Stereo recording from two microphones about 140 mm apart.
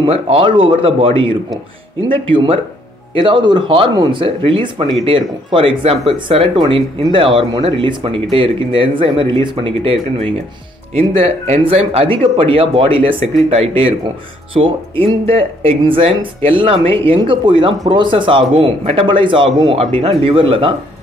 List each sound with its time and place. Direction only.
0.0 s speech: 40° right (ahead or behind)